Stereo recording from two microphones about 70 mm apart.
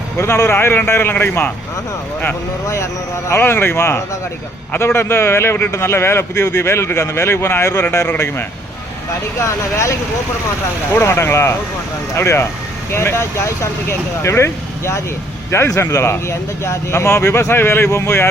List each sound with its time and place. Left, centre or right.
0.2 s speech: left
2.6 s speech: left
9.4 s speech: left
10.9 s speech: left